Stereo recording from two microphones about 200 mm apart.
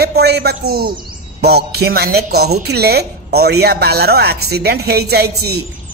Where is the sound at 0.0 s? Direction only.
55° right (ahead or behind).